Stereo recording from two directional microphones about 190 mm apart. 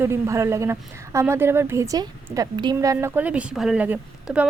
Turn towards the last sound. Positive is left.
turn(degrees=-5)  # may be behind; listen again after turning